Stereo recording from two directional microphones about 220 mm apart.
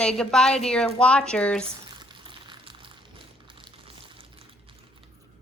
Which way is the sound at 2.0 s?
20° right (ahead or behind).